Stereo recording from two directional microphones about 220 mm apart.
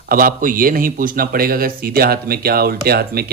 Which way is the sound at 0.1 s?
40° right (ahead or behind).